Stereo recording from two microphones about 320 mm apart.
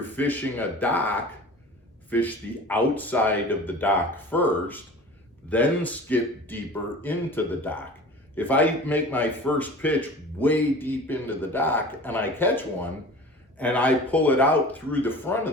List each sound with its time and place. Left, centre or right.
0.0 s speech: centre